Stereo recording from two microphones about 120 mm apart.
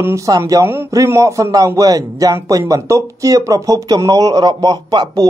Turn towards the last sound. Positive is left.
turn(degrees=-35)  # may be behind; listen again after turning